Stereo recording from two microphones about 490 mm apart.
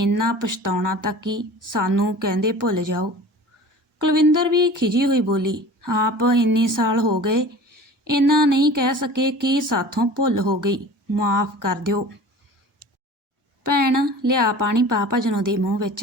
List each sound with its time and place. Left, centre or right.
0.2 s a woman's voice: right
4.0 s a woman's voice: right
7.2 s a sound: right
8.3 s a woman's voice: right
13.7 s a woman's voice: right